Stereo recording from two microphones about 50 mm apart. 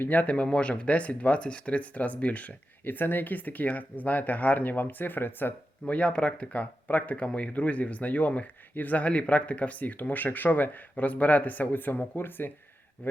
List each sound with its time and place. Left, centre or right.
0.0 s speech: left
5.8 s speech: left